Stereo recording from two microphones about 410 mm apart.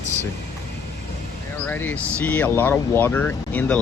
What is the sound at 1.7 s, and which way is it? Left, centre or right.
Speech, centre.